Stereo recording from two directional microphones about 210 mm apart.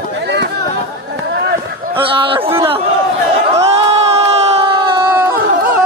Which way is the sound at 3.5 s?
30° right (ahead or behind).